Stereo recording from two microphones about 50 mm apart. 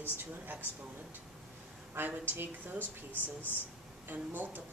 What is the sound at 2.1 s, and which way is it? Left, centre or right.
A woman's voice, right.